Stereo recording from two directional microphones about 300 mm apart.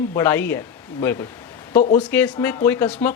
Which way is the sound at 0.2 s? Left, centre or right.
Centre.